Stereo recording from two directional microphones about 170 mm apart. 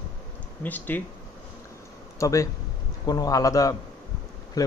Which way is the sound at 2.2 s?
20° left (ahead or behind).